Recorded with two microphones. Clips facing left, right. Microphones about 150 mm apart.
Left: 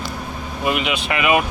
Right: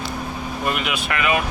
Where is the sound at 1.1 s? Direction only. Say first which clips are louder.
Left 4 dB; 15° left (ahead or behind).